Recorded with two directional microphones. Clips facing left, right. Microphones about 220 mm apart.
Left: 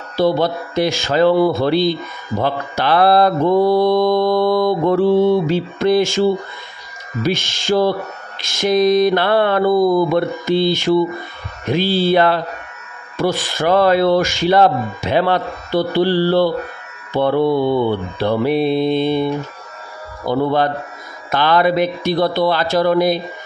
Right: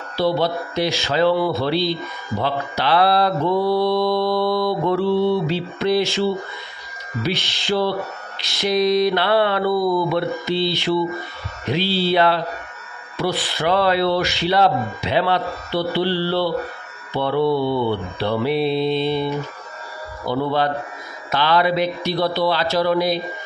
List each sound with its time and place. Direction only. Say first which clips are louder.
0.2 s mantra: left 4 dB; 50° left (ahead or behind)
20.2 s mantra: left 4 dB; 50° left (ahead or behind)